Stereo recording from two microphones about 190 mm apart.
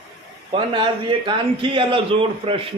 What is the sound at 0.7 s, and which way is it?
A man's voice, 25° right (ahead or behind).